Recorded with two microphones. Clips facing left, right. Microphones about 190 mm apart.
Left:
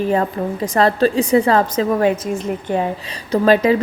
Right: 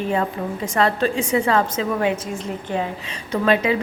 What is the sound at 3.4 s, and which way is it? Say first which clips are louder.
Speech: left 5 dB; 40° left (ahead or behind).